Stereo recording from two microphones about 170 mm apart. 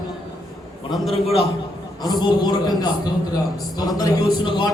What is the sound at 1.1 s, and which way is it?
Speech, 35° left (ahead or behind).